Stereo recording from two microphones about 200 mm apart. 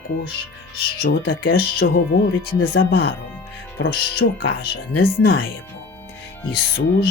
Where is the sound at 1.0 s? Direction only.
55° left (ahead or behind).